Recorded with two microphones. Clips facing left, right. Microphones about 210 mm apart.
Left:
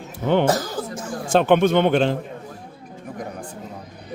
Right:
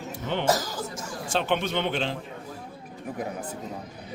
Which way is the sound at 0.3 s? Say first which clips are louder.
Left 7 dB; 50° left (ahead or behind).